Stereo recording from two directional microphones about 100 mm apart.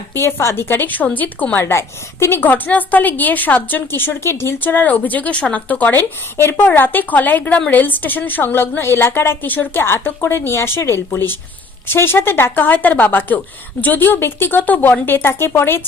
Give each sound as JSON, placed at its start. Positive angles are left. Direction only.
{"t": 0.1, "sound": "a woman's voice", "side_deg": 25}
{"t": 1.6, "sound": "a woman's voice", "side_deg": 30}